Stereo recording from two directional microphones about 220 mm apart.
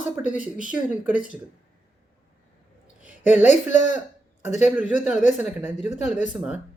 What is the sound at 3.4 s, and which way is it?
Speech, 30° left (ahead or behind).